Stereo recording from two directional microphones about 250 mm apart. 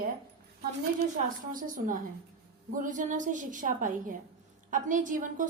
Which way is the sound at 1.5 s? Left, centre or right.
Right.